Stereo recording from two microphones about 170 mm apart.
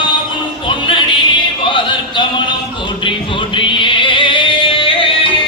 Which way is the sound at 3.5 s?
30° left (ahead or behind).